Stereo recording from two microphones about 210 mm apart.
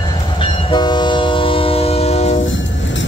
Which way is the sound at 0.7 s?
20° left (ahead or behind).